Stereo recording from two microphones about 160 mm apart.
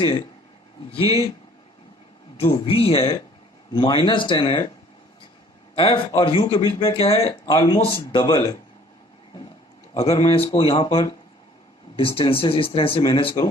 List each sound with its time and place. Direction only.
0.9 s speech: 35° left (ahead or behind)
2.4 s speech: 35° left (ahead or behind)
5.7 s speech: 35° left (ahead or behind)
7.4 s speech: 25° left (ahead or behind)
9.9 s speech: 40° left (ahead or behind)